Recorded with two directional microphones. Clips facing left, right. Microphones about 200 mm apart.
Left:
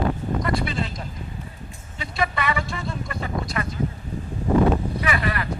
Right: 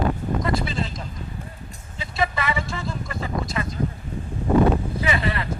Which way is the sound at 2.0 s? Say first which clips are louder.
Even; 25° right (ahead or behind).